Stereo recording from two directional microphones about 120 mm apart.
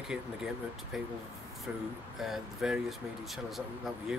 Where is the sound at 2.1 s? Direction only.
5° right (ahead or behind).